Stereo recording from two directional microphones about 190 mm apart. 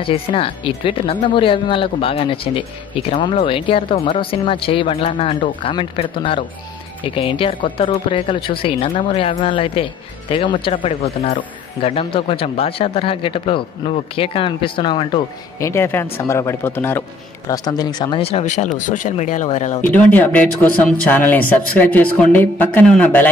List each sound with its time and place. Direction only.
0.0 s speech: 30° left (ahead or behind)
15.6 s speech: 15° left (ahead or behind); by 19.8 s 40° left (ahead or behind)
19.8 s speech: 10° left (ahead or behind)